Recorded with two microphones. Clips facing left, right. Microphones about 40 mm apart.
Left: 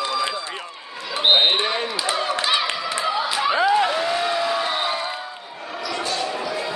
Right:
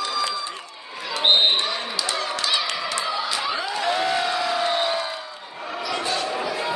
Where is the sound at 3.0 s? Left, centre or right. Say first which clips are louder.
Left 4 dB; centre.